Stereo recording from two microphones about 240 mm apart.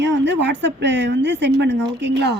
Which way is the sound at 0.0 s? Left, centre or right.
Right.